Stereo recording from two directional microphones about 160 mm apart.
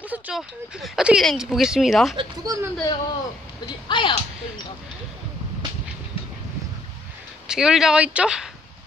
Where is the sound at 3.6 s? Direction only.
30° left (ahead or behind).